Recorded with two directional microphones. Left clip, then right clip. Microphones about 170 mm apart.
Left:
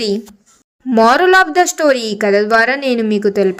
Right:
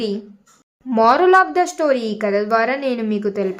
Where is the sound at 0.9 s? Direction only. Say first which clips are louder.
Left 3 dB; 25° left (ahead or behind).